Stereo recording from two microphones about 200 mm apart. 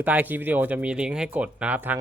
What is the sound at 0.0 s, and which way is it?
Speech, 10° right (ahead or behind).